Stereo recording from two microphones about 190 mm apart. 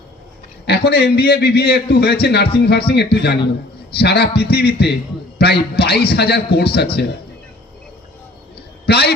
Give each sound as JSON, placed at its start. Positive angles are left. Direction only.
{"t": 0.6, "sound": "a man's voice", "side_deg": 60}
{"t": 8.9, "sound": "a man's voice", "side_deg": 60}